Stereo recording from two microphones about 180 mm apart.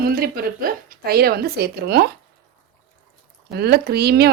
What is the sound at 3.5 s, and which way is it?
Speech, 65° right (ahead or behind).